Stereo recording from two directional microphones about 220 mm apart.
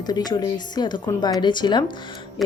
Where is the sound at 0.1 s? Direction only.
20° left (ahead or behind).